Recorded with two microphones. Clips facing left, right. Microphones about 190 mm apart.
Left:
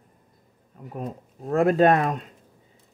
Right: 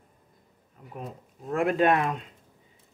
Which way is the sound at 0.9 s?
40° left (ahead or behind).